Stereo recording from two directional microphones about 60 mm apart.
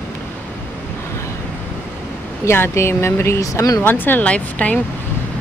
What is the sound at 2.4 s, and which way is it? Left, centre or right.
Speech, left.